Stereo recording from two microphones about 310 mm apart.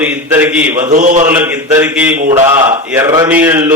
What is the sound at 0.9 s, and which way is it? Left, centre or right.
Speech, right.